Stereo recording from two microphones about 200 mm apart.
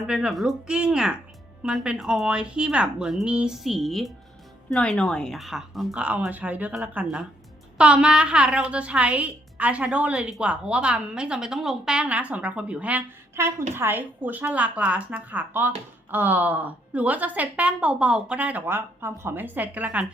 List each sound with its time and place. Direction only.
0.0 s a woman's voice: centre (ahead or behind)